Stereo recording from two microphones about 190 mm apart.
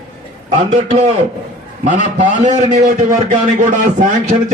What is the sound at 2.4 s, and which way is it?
A man's voice, 35° right (ahead or behind).